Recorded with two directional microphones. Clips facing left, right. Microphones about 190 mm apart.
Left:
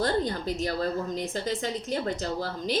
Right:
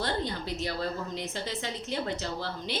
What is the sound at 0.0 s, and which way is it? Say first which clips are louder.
A woman's voice: left 5 dB; 45° left (ahead or behind).